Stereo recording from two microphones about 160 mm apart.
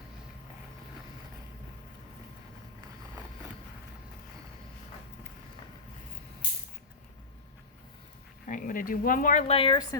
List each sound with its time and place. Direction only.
8.4 s speech: 55° left (ahead or behind)
9.5 s a woman's voice: 35° left (ahead or behind)